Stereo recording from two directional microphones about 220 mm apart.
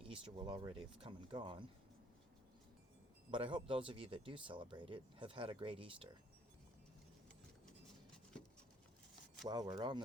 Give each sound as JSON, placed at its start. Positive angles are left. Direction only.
{"t": 0.0, "sound": "speech", "side_deg": -25}
{"t": 3.3, "sound": "speech", "side_deg": -25}
{"t": 9.5, "sound": "speech", "side_deg": -20}